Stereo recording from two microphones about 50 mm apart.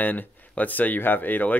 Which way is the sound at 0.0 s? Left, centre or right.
Left.